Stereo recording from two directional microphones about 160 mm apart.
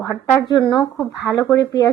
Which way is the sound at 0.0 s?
20° left (ahead or behind).